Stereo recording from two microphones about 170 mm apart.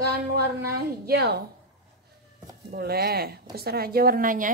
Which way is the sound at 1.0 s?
70° right (ahead or behind).